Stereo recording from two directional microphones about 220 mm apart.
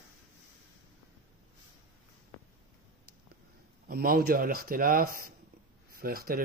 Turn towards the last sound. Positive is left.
turn(degrees=-40)  # may be behind; listen again after turning